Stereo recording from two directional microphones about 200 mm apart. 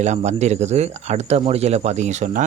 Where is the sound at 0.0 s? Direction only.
35° right (ahead or behind).